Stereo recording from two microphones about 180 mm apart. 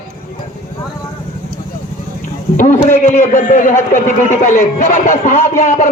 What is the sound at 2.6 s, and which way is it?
Speech, 45° left (ahead or behind).